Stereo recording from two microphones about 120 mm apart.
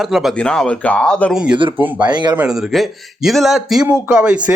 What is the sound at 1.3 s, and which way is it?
Speech, 10° right (ahead or behind).